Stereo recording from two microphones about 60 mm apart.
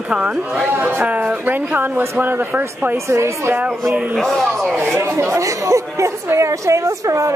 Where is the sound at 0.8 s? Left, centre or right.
Right.